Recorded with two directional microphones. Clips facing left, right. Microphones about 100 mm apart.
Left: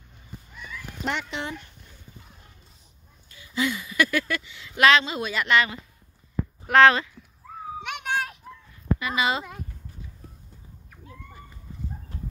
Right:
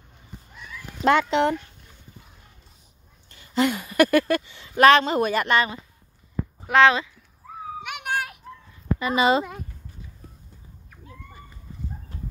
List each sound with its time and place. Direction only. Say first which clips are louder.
1.0 s speech: right 12 dB; 70° right (ahead or behind)
3.3 s speech: right 5 dB; 55° right (ahead or behind)
6.7 s speech: even; 5° right (ahead or behind)
7.8 s children playing: even; 10° right (ahead or behind)
9.0 s speech: right 7 dB; 35° right (ahead or behind)